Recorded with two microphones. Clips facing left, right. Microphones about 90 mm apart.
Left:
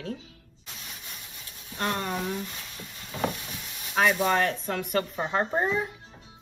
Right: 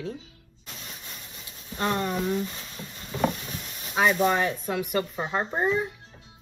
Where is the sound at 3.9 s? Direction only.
10° right (ahead or behind).